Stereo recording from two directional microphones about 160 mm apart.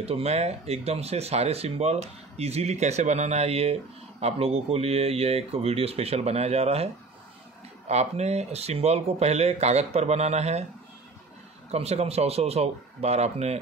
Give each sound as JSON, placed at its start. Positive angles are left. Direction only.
{"t": 0.0, "sound": "speech", "side_deg": -40}
{"t": 11.7, "sound": "speech", "side_deg": -40}